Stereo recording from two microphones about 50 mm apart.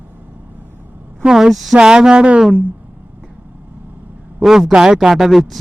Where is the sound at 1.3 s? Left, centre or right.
Centre.